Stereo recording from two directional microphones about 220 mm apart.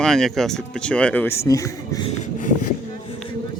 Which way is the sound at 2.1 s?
35° left (ahead or behind).